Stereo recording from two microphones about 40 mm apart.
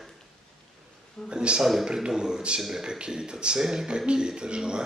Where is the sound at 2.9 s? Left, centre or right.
Right.